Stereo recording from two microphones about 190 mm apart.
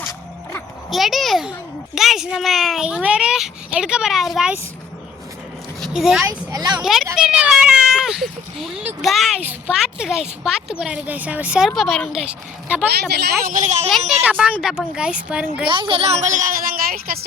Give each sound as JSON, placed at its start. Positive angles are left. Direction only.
{"t": 0.9, "sound": "a woman's voice", "side_deg": 0}
{"t": 5.8, "sound": "a woman's voice", "side_deg": 0}
{"t": 6.2, "sound": "speech", "side_deg": -20}
{"t": 6.8, "sound": "a woman's voice", "side_deg": 0}
{"t": 13.4, "sound": "a woman's voice", "side_deg": -40}
{"t": 14.3, "sound": "a woman's voice", "side_deg": -5}
{"t": 15.7, "sound": "a woman's voice", "side_deg": -25}